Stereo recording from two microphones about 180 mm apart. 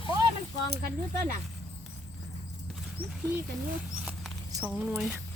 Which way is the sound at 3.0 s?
10° right (ahead or behind).